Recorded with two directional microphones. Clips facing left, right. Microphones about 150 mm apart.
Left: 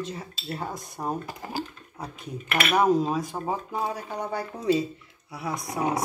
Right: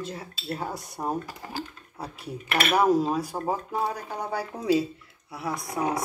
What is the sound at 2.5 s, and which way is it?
Speech, 35° right (ahead or behind).